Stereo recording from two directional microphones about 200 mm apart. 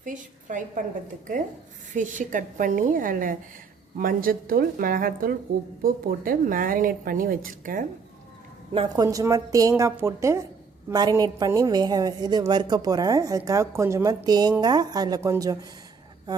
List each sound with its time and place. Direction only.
0.0 s a woman's voice: 40° right (ahead or behind)
1.9 s a woman's voice: 40° right (ahead or behind)
8.7 s a woman's voice: 20° right (ahead or behind)